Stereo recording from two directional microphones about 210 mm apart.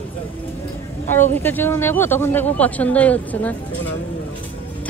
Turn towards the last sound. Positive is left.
turn(degrees=5)  # may be behind; listen again after turning